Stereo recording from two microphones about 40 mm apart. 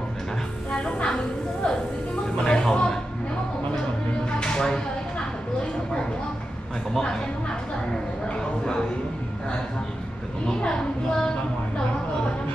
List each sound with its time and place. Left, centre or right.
0.7 s music: left
2.3 s speech: left
4.4 s a sound: centre
7.0 s speech: left
10.4 s speech: centre